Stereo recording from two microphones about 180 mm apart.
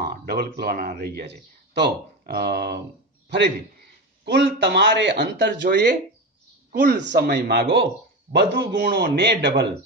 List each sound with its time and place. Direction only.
0.0 s speech: 60° right (ahead or behind)
4.2 s speech: 70° right (ahead or behind)
6.7 s speech: 55° right (ahead or behind)